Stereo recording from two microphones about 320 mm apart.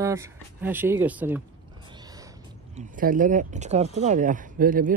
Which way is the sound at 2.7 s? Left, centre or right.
Right.